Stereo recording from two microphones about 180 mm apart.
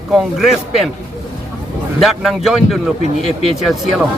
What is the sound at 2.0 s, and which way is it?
Speech, centre (ahead or behind).